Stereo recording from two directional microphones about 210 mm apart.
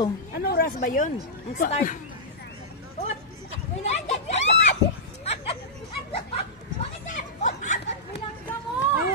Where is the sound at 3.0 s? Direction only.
35° left (ahead or behind).